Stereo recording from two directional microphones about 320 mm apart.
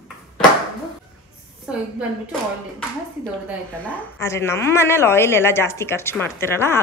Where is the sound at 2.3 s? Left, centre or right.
Centre.